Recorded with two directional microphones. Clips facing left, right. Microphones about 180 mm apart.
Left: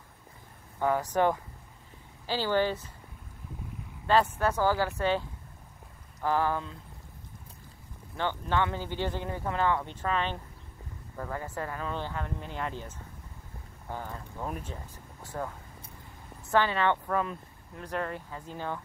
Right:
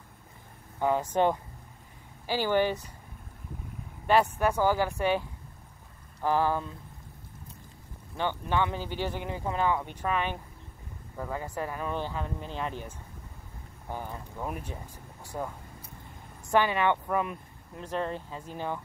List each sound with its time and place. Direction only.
0.7 s speech: 20° right (ahead or behind)
4.1 s speech: 15° right (ahead or behind)
6.2 s speech: 15° right (ahead or behind)
8.2 s speech: 15° right (ahead or behind)